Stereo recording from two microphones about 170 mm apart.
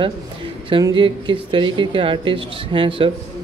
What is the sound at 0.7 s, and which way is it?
Speech, 30° right (ahead or behind).